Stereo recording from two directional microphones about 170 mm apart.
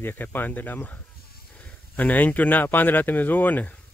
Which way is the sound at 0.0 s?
10° left (ahead or behind).